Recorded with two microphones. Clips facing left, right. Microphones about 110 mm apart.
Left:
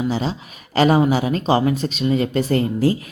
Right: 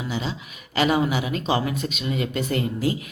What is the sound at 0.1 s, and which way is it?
Speech, 35° left (ahead or behind).